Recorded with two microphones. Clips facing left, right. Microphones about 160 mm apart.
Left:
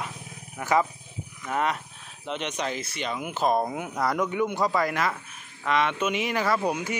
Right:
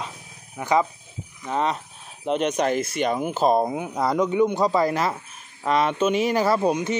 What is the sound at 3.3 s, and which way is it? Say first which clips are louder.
Speech: right 2 dB; 30° right (ahead or behind).